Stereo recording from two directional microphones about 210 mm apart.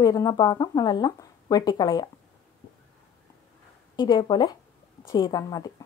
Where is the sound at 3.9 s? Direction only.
20° left (ahead or behind).